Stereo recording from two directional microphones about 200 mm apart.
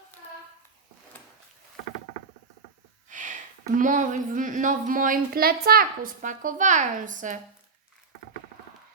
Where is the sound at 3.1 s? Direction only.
40° right (ahead or behind).